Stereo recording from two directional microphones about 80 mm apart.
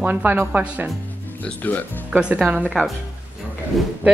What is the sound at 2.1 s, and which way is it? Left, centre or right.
Speech, centre.